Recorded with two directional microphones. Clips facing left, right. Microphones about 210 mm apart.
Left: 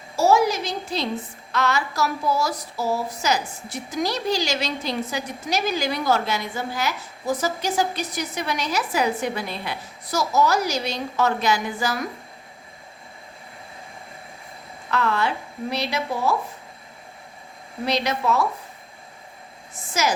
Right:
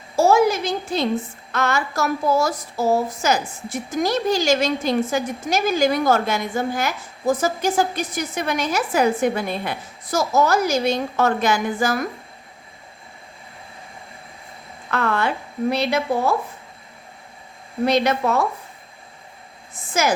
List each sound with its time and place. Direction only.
0.2 s a sound: 55° right (ahead or behind)
1.5 s speech: 50° right (ahead or behind)
14.8 s a woman's voice: 50° right (ahead or behind)
17.8 s speech: 50° right (ahead or behind)
19.9 s speech: 55° right (ahead or behind)